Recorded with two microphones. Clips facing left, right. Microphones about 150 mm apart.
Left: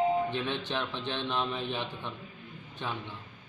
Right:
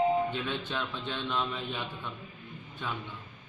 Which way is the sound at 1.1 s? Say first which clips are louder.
Left 1 dB; 25° left (ahead or behind).